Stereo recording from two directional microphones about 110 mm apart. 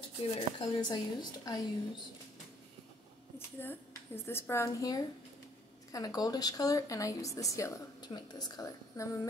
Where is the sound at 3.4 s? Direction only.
20° left (ahead or behind).